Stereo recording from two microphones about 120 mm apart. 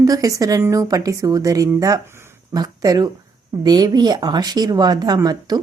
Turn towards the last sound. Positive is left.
turn(degrees=-35)  # may be behind; listen again after turning